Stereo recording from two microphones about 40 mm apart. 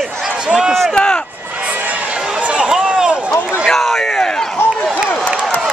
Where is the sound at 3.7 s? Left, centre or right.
Centre.